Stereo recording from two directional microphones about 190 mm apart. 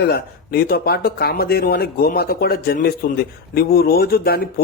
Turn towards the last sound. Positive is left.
turn(degrees=55)  # may be behind; listen again after turning